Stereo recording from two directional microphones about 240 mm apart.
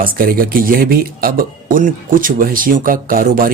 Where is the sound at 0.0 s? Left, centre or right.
Right.